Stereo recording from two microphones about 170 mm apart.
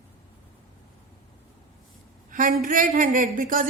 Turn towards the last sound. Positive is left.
turn(degrees=-50)  # may be behind; listen again after turning